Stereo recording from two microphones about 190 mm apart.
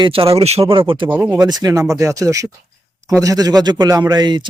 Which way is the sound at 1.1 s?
10° right (ahead or behind).